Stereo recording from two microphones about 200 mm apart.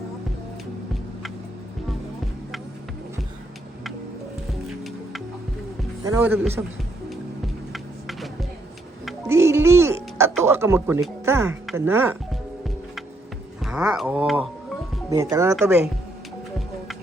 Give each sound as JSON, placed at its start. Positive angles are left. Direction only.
{"t": 6.1, "sound": "speech", "side_deg": -10}
{"t": 7.1, "sound": "music", "side_deg": 0}
{"t": 9.2, "sound": "music", "side_deg": -15}
{"t": 11.3, "sound": "speech", "side_deg": -15}
{"t": 13.7, "sound": "speech", "side_deg": -5}